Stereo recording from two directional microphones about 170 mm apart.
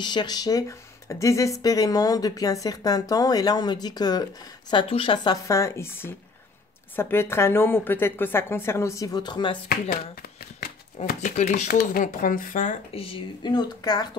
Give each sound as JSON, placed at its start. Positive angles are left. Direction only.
{"t": 0.0, "sound": "a woman's voice", "side_deg": 25}
{"t": 11.2, "sound": "speech", "side_deg": 45}
{"t": 11.8, "sound": "speech", "side_deg": 55}
{"t": 12.9, "sound": "speech", "side_deg": 30}